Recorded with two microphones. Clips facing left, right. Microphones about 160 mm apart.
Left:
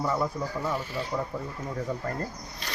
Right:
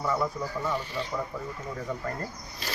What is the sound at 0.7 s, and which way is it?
Speech, 5° left (ahead or behind).